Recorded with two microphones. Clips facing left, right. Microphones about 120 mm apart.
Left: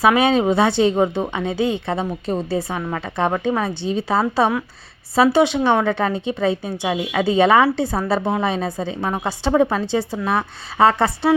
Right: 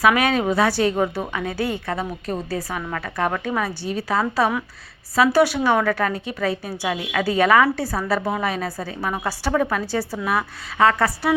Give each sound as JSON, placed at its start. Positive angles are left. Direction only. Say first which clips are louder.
{"t": 0.0, "sound": "a woman's voice", "louder": "left 3 dB", "side_deg": 25}